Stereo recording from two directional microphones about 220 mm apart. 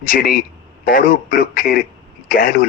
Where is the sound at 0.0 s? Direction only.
40° left (ahead or behind).